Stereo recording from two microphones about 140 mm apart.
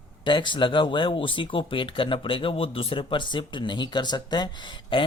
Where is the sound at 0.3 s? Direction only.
35° left (ahead or behind).